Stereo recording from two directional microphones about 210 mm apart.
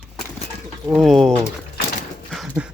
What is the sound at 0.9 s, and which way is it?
Speech, centre (ahead or behind).